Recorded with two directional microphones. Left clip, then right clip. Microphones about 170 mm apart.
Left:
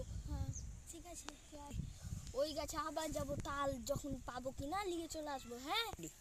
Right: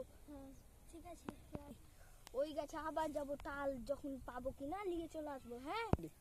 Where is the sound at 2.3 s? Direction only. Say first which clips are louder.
Left 2 dB; centre (ahead or behind).